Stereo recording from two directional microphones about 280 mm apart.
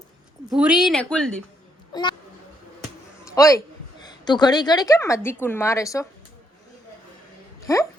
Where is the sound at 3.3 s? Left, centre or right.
Centre.